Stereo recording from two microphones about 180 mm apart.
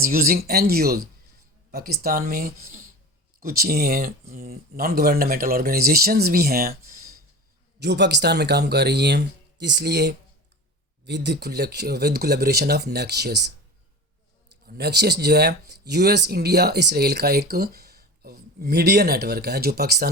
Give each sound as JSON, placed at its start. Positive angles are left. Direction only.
{"t": 0.0, "sound": "speech", "side_deg": -55}
{"t": 7.8, "sound": "speech", "side_deg": -70}
{"t": 14.7, "sound": "speech", "side_deg": -65}